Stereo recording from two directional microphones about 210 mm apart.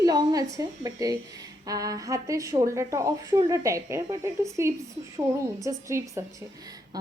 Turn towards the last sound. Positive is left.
turn(degrees=-15)  # may be behind; listen again after turning